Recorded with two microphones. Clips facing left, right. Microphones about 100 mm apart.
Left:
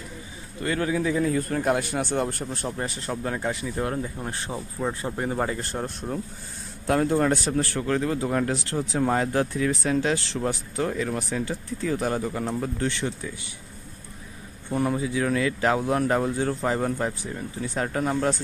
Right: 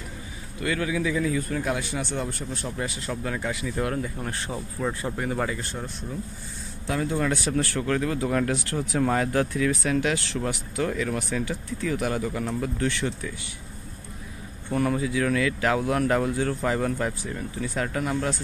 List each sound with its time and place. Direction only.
0.6 s a man's voice: 35° left (ahead or behind)
3.1 s speech: 35° left (ahead or behind)
5.2 s speech: 30° left (ahead or behind)
5.9 s speech: 60° left (ahead or behind)
6.9 s speech: 50° left (ahead or behind); by 13.3 s 25° left (ahead or behind)
14.7 s speech: 20° left (ahead or behind)